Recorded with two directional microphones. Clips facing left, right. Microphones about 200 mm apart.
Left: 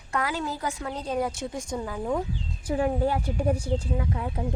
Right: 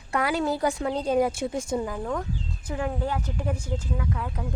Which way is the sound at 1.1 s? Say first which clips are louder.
Right 4 dB; 10° right (ahead or behind).